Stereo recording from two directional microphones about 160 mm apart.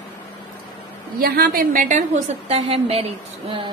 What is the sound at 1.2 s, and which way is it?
A woman's voice, 70° right (ahead or behind).